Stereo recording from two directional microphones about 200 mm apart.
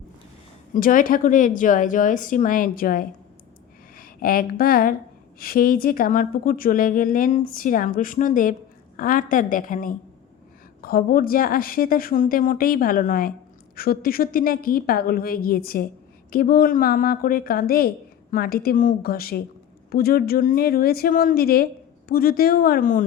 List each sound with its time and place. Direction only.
0.7 s a woman's voice: 40° left (ahead or behind)